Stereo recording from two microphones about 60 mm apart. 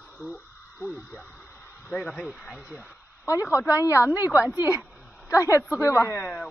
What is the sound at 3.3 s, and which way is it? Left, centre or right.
A woman's voice, left.